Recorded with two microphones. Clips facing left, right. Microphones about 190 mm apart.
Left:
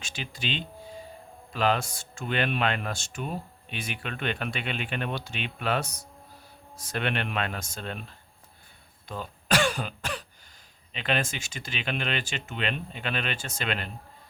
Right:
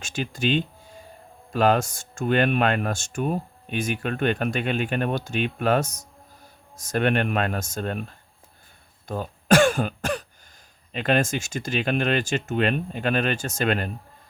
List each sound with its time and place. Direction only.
0.0 s speech: 45° right (ahead or behind)
9.0 s throat clearing: 45° right (ahead or behind)
10.9 s speech: 45° right (ahead or behind)